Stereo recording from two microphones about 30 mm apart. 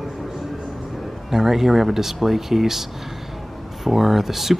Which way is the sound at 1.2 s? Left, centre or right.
Centre.